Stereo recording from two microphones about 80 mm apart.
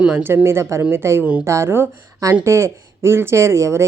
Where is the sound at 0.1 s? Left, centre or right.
Right.